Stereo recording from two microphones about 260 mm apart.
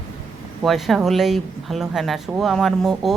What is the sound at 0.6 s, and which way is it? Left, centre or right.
Speech, centre.